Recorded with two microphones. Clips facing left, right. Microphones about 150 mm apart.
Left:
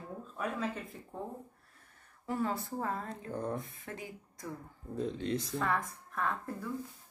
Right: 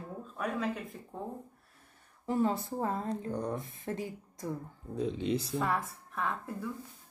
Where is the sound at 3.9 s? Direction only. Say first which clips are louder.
Right 10 dB; 30° right (ahead or behind).